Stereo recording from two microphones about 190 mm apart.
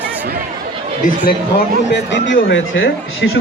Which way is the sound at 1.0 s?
50° left (ahead or behind).